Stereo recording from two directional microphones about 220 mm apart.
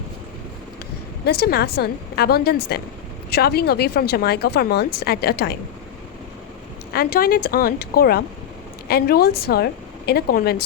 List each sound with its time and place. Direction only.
1.2 s speech: 45° left (ahead or behind)
6.9 s speech: 45° left (ahead or behind)